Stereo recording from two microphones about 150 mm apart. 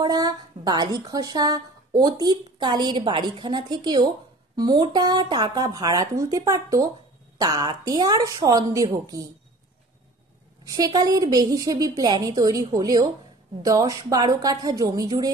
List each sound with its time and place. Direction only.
0.0 s a woman's voice: 30° right (ahead or behind)
10.7 s a woman's voice: 25° right (ahead or behind)